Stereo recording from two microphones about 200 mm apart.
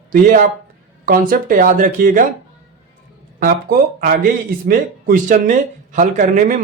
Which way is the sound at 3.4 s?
45° right (ahead or behind).